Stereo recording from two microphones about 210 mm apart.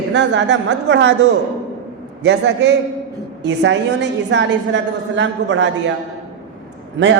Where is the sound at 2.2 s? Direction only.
55° right (ahead or behind).